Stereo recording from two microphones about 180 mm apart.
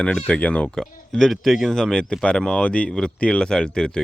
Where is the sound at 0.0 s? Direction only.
5° left (ahead or behind).